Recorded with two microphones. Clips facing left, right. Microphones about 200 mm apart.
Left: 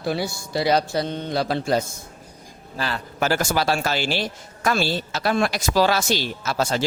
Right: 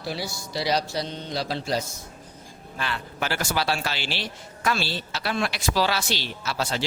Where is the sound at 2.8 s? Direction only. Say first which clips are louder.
Left 5 dB; 40° left (ahead or behind).